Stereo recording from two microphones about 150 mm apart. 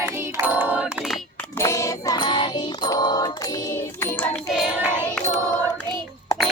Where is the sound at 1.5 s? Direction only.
20° left (ahead or behind).